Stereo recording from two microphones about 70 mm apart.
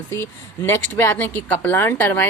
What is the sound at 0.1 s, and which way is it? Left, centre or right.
A woman's voice, left.